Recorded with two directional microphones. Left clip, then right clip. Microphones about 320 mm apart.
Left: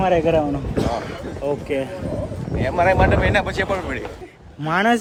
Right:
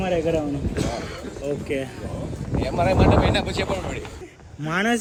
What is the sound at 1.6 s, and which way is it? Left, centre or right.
Speech, centre.